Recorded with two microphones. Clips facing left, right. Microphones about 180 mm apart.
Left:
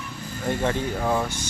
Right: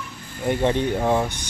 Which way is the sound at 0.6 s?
20° right (ahead or behind).